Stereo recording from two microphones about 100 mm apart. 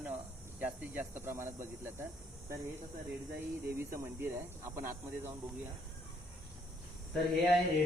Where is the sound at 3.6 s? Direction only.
25° right (ahead or behind).